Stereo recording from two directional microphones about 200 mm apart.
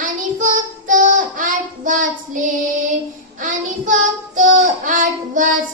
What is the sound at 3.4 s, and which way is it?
Child singing, 40° right (ahead or behind).